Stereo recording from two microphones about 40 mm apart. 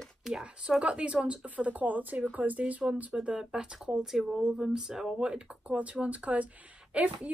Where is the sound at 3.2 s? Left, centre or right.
Right.